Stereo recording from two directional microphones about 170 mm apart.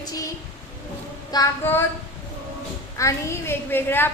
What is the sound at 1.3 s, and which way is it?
Speech, 20° left (ahead or behind).